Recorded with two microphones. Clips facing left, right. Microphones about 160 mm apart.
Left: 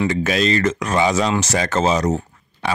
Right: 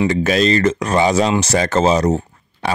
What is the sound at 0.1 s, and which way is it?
Speech, 35° right (ahead or behind).